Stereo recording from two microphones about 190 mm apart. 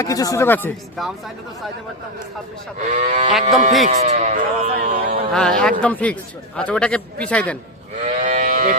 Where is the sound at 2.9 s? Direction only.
40° right (ahead or behind).